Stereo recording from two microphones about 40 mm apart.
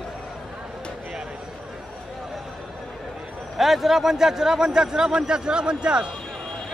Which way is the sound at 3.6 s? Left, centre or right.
Centre.